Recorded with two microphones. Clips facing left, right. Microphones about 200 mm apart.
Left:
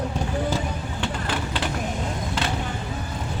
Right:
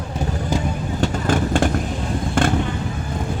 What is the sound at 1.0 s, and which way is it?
Vehicle, 45° right (ahead or behind).